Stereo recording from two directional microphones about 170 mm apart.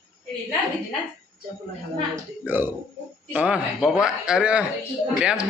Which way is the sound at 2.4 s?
10° right (ahead or behind).